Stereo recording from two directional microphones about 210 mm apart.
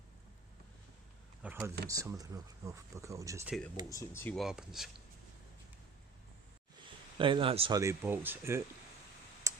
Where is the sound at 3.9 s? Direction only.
15° left (ahead or behind).